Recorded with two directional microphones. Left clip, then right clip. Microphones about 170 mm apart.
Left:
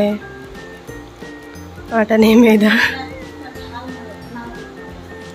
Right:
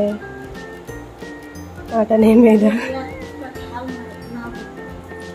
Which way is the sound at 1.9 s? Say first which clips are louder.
Left 1 dB; centre (ahead or behind).